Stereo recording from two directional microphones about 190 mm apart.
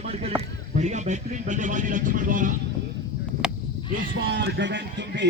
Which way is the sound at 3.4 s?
5° right (ahead or behind).